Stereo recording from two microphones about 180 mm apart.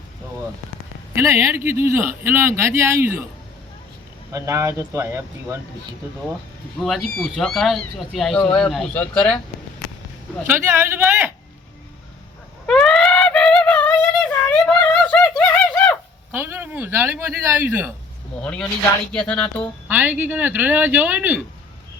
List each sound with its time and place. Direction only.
1.2 s speech: 15° right (ahead or behind)
4.3 s speech: 15° right (ahead or behind)
7.2 s speech: centre (ahead or behind)
10.4 s speech: 15° right (ahead or behind)
12.6 s music: centre (ahead or behind)
16.3 s a sound: 10° right (ahead or behind)
18.3 s speech: 5° left (ahead or behind)
19.9 s speech: 10° right (ahead or behind)